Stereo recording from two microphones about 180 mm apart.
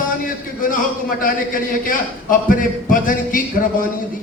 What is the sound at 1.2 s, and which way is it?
A man's voice, 50° left (ahead or behind).